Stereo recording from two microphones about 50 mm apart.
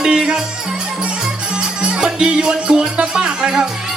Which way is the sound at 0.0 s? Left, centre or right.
Centre.